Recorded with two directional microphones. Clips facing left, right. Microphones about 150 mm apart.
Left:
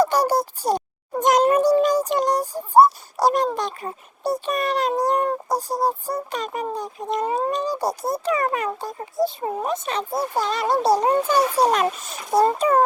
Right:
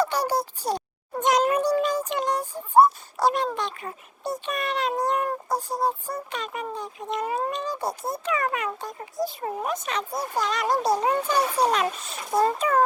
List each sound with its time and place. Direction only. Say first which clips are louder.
0.0 s a child's voice: left 5 dB; 40° left (ahead or behind)
1.2 s a sound: left 5 dB; 45° left (ahead or behind)
5.0 s speech: left 4 dB; 35° left (ahead or behind)